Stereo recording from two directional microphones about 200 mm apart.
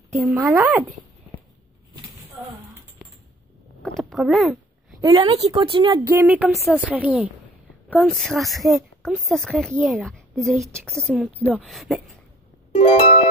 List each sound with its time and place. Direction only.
0.1 s a woman's voice: centre (ahead or behind)
4.0 s speech: centre (ahead or behind)
5.0 s a woman's voice: 20° right (ahead or behind)
5.9 s a woman's voice: 10° right (ahead or behind)
12.7 s music: 30° left (ahead or behind)